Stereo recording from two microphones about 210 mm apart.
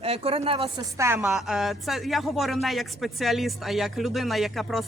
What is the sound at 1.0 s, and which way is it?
A woman's voice, 10° right (ahead or behind).